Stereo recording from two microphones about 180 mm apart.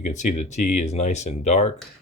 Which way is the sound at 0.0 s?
40° left (ahead or behind).